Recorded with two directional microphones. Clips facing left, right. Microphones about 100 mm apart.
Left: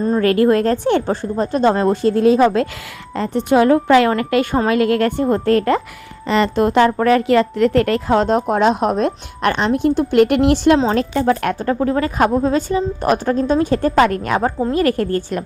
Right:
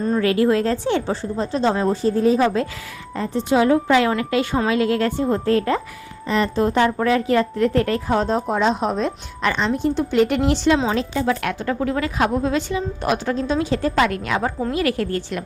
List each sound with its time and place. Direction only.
0.0 s a woman's voice: 40° left (ahead or behind); by 2.6 s 70° left (ahead or behind)
3.2 s a woman's voice: 60° left (ahead or behind); by 15.4 s 40° left (ahead or behind)